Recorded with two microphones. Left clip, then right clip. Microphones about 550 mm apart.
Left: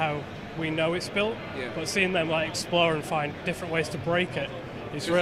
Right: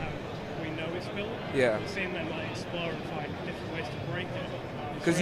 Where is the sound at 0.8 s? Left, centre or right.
Left.